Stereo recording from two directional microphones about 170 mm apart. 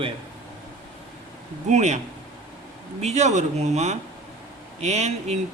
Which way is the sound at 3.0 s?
40° right (ahead or behind).